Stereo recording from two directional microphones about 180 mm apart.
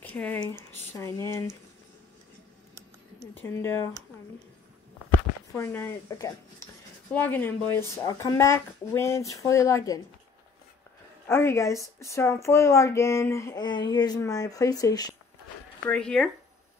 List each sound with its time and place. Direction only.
0.0 s speech: 10° left (ahead or behind)
3.3 s speech: 15° left (ahead or behind)
5.5 s speech: 10° left (ahead or behind)
11.2 s speech: 15° left (ahead or behind)
15.9 s speech: 5° left (ahead or behind)